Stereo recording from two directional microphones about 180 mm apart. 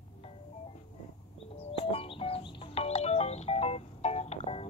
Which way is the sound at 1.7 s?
30° left (ahead or behind).